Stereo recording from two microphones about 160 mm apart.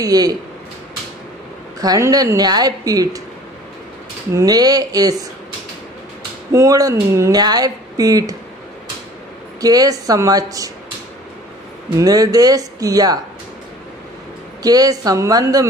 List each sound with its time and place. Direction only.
0.0 s speech: 25° right (ahead or behind)
1.8 s speech: 20° right (ahead or behind)
4.3 s speech: 20° right (ahead or behind)
6.5 s speech: 20° right (ahead or behind)
9.6 s speech: 25° right (ahead or behind)
12.0 s speech: 25° right (ahead or behind)
14.6 s speech: 25° right (ahead or behind)